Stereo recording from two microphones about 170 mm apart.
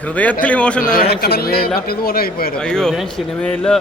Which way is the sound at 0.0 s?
10° left (ahead or behind).